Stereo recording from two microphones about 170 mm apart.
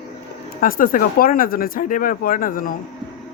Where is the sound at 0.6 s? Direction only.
55° left (ahead or behind).